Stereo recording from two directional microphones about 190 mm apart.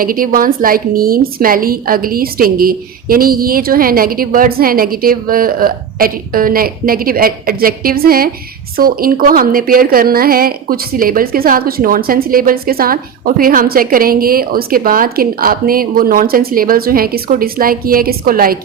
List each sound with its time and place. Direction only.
0.0 s a woman's voice: 50° right (ahead or behind)